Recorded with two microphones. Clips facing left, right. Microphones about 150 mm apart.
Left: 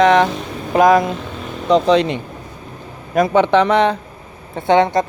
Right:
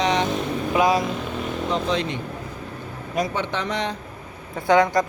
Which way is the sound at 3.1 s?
65° left (ahead or behind).